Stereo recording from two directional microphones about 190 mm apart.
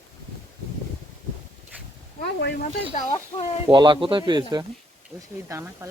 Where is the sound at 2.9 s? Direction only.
35° left (ahead or behind).